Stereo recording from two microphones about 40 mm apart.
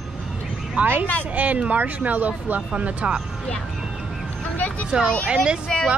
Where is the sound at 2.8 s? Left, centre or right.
Right.